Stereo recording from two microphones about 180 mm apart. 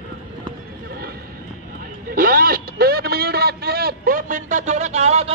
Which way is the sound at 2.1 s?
55° right (ahead or behind).